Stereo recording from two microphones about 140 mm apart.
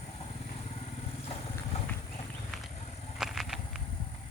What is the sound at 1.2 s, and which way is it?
Vehicle, 50° left (ahead or behind).